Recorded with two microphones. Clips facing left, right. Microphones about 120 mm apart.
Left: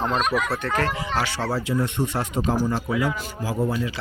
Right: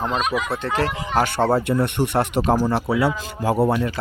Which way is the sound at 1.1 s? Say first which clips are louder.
Right 6 dB; 50° right (ahead or behind).